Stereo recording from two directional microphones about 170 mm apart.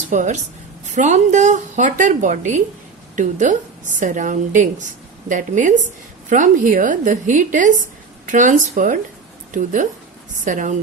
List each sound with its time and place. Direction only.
0.1 s a woman's voice: 45° right (ahead or behind)